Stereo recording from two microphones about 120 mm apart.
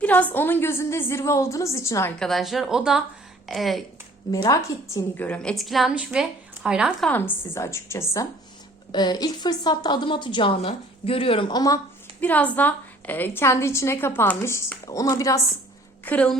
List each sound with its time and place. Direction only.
0.0 s a woman's voice: 15° left (ahead or behind)
2.1 s speech: 5° left (ahead or behind)
4.4 s a woman's voice: 30° left (ahead or behind)
5.1 s a woman's voice: 15° left (ahead or behind); by 6.9 s 5° right (ahead or behind)
7.0 s a woman's voice: 15° left (ahead or behind)
8.9 s a woman's voice: 35° left (ahead or behind)
12.2 s a woman's voice: 15° left (ahead or behind)
16.0 s a woman's voice: 10° left (ahead or behind)